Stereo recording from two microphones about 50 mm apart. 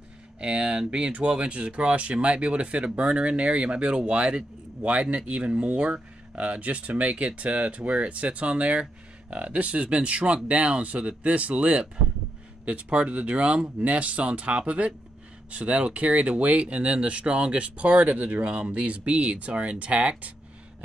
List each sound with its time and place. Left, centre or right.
0.4 s speech: right